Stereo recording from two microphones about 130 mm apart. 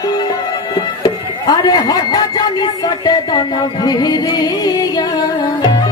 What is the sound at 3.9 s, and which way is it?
Music, 30° left (ahead or behind).